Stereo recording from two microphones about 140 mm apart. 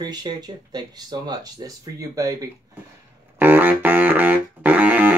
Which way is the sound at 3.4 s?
15° right (ahead or behind).